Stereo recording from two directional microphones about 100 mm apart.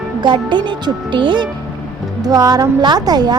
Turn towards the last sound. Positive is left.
turn(degrees=-45)  # may be behind; listen again after turning